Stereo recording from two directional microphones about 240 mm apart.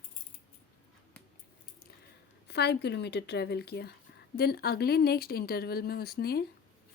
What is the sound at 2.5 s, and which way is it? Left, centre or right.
Speech, left.